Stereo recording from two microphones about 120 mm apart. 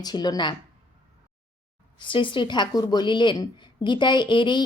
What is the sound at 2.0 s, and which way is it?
A woman's voice, 45° left (ahead or behind).